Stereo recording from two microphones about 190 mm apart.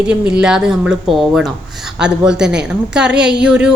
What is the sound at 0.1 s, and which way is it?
A woman's voice, 5° right (ahead or behind).